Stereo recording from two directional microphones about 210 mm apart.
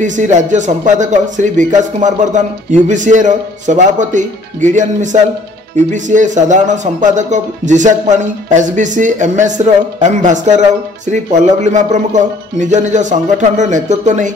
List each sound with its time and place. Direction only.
0.0 s speech: 35° right (ahead or behind)